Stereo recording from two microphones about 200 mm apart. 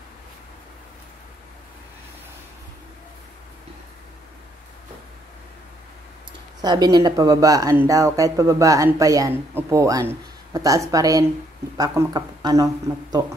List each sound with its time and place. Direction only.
6.6 s speech: 20° right (ahead or behind)